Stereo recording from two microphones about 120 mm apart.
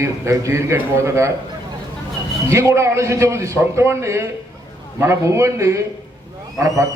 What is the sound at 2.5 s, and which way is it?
A man's voice, 25° right (ahead or behind).